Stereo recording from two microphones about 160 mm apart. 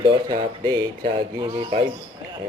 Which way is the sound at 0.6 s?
25° right (ahead or behind).